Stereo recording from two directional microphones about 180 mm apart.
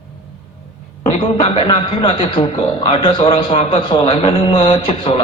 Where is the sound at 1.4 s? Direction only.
30° left (ahead or behind).